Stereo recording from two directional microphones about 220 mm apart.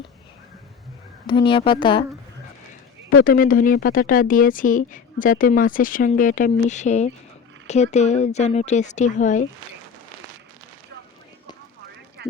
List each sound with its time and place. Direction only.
1.3 s speech: 20° left (ahead or behind)
3.2 s speech: 40° left (ahead or behind)